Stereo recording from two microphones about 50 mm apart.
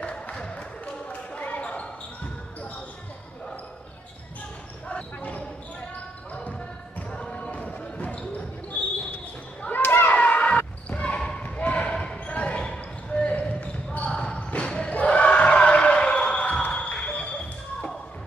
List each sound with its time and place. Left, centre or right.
0.0 s basketball bounce: centre
4.8 s basketball bounce: left
7.1 s basketball bounce: left
9.6 s basketball bounce: left
10.1 s a sound: left
10.6 s basketball bounce: left
11.1 s basketball bounce: centre
11.4 s basketball bounce: left
14.9 s crowd: left